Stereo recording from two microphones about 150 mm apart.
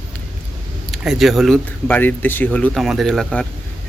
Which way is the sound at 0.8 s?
Centre (ahead or behind).